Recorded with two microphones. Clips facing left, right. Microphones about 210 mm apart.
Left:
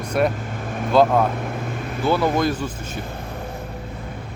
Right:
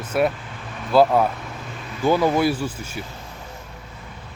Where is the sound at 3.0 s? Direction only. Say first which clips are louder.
Left 5 dB; 55° left (ahead or behind).